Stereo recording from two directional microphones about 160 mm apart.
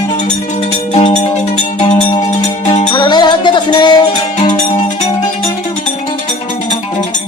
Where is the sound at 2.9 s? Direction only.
30° left (ahead or behind).